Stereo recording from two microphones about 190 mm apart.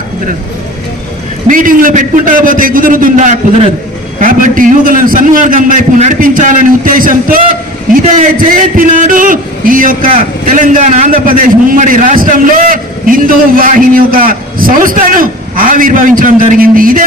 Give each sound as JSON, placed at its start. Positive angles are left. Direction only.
{"t": 1.5, "sound": "a man's voice", "side_deg": -45}